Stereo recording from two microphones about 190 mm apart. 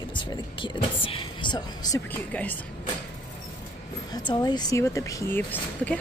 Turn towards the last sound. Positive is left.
turn(degrees=10)  # may be behind; listen again after turning